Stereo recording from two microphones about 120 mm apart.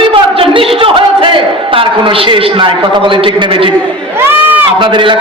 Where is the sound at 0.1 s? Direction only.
50° right (ahead or behind).